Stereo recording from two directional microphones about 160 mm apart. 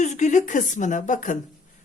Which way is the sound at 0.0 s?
45° left (ahead or behind).